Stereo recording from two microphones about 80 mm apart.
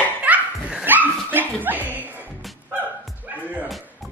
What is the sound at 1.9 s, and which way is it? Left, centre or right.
Music, right.